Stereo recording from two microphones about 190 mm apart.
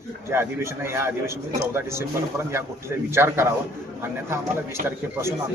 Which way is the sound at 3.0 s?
10° right (ahead or behind).